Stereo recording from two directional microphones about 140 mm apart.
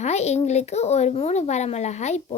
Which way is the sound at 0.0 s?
50° left (ahead or behind).